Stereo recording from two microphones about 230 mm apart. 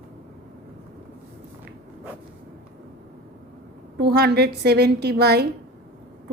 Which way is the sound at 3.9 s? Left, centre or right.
Right.